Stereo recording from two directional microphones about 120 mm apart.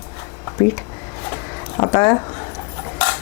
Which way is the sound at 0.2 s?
25° left (ahead or behind).